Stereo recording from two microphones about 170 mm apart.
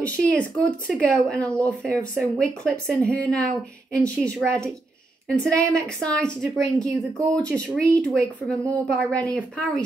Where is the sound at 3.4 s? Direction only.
70° right (ahead or behind).